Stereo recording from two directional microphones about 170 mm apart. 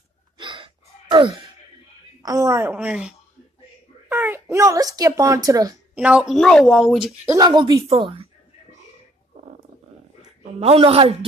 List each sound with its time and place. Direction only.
0.4 s gasp: 30° right (ahead or behind)
2.2 s a woman's voice: 20° right (ahead or behind)
5.9 s speech: 5° right (ahead or behind)
7.2 s speech: 25° right (ahead or behind)
10.6 s a woman's voice: 35° right (ahead or behind)